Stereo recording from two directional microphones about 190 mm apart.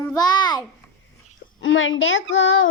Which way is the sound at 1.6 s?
90° left.